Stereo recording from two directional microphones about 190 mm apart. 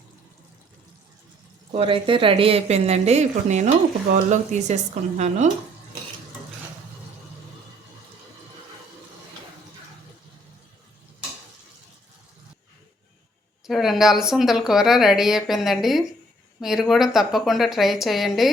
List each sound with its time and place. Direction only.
1.7 s speech: 30° right (ahead or behind)
13.7 s speech: centre (ahead or behind)